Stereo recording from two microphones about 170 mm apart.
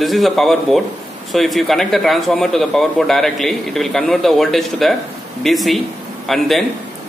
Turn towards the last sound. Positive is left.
turn(degrees=0)  # may be behind; listen again after turning